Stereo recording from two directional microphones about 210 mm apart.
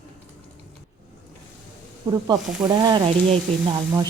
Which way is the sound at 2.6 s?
20° right (ahead or behind).